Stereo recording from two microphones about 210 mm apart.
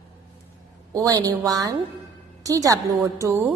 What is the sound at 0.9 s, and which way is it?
A woman's voice, 15° right (ahead or behind).